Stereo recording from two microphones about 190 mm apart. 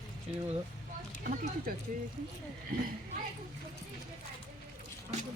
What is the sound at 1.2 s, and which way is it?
Speech, 50° right (ahead or behind).